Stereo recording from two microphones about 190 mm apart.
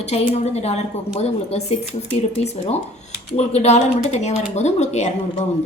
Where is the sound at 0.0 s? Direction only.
35° left (ahead or behind).